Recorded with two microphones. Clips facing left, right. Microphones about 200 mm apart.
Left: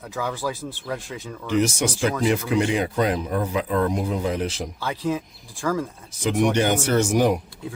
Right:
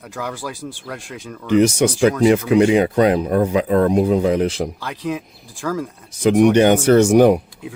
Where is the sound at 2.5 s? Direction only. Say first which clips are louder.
Right 8 dB; 65° right (ahead or behind).